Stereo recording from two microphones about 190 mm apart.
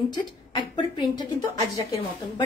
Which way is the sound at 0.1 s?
25° left (ahead or behind).